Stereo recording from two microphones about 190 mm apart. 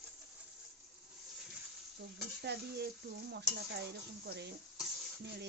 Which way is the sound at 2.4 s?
60° right (ahead or behind).